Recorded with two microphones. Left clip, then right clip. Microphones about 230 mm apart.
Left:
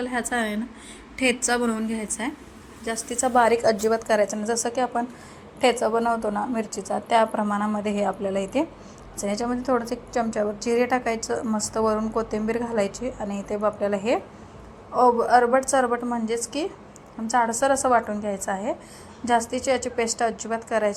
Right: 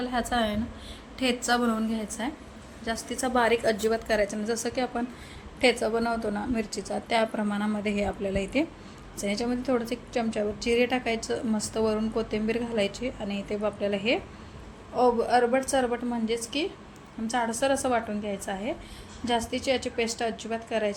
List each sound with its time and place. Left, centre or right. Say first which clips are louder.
0.0 s a woman's voice: left 1 dB; centre